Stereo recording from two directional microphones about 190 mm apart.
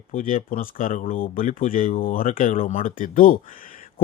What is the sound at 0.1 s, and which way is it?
A man's voice, 45° left (ahead or behind).